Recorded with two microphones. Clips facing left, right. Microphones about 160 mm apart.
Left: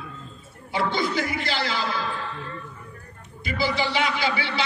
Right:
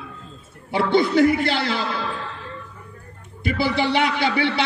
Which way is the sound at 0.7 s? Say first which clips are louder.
Right 8 dB; 60° right (ahead or behind).